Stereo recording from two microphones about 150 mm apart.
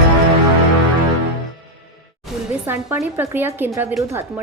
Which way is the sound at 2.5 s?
15° right (ahead or behind).